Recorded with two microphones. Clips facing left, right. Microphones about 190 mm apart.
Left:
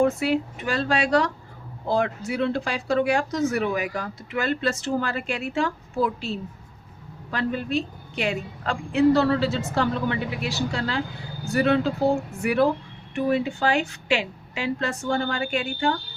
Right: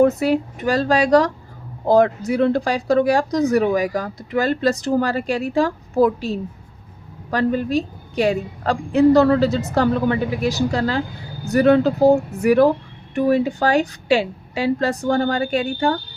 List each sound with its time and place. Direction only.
0.0 s a woman's voice: 40° right (ahead or behind)